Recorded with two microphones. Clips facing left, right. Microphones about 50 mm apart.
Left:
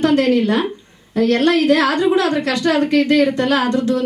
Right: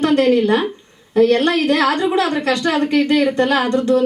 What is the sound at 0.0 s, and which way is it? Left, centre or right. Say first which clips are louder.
Speech: right 1 dB; right.